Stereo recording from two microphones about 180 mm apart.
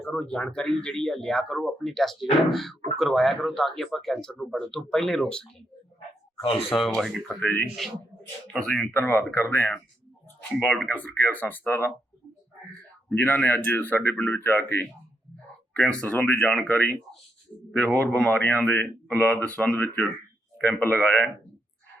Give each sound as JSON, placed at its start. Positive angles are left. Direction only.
{"t": 0.0, "sound": "speech", "side_deg": 5}
{"t": 6.5, "sound": "speech", "side_deg": 0}
{"t": 7.3, "sound": "speech", "side_deg": 10}
{"t": 13.1, "sound": "speech", "side_deg": 10}